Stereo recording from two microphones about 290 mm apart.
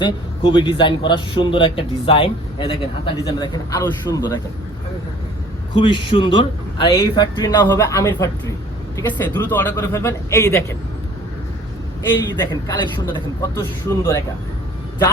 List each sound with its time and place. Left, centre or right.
0.0 s a man's voice: centre
5.7 s a man's voice: centre
12.1 s a man's voice: centre